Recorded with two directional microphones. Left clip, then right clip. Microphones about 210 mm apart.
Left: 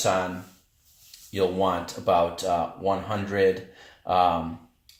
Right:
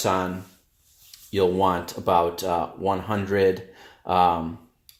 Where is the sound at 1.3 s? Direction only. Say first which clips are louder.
Right 3 dB; 50° right (ahead or behind).